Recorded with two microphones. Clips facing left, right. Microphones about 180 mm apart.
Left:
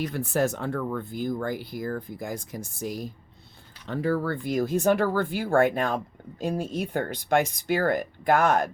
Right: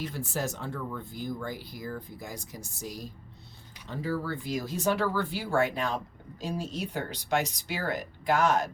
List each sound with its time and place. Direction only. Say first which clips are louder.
0.0 s speech: left 8 dB; 60° left (ahead or behind)